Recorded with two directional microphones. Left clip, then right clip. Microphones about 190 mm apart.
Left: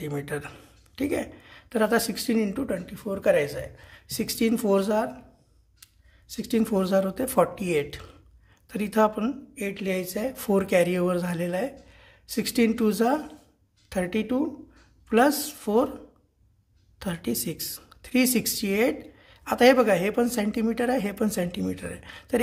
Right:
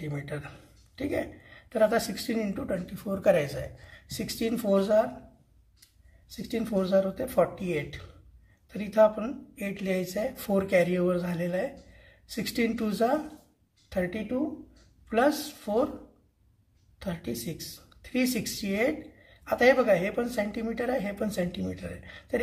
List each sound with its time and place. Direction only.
0.0 s speech: 25° left (ahead or behind)
6.3 s speech: 30° left (ahead or behind)
17.0 s speech: 25° left (ahead or behind)